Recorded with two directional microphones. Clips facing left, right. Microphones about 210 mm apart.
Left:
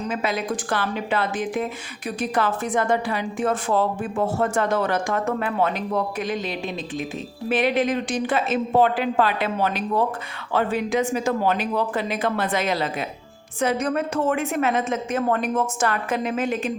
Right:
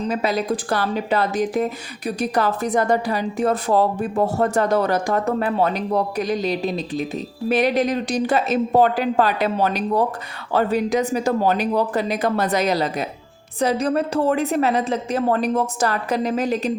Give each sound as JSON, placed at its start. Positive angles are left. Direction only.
{"t": 0.1, "sound": "a woman's voice", "side_deg": -35}